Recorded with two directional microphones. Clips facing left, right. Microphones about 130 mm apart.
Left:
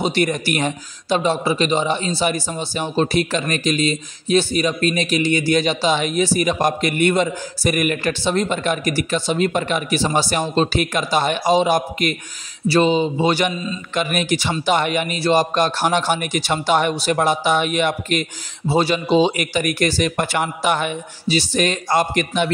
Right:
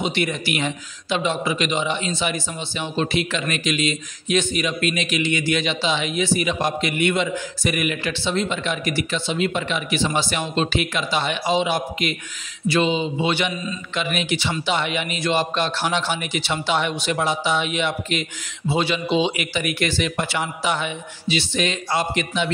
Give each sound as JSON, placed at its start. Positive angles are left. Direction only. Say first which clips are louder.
{"t": 0.0, "sound": "a man's voice", "louder": "left 4 dB", "side_deg": 40}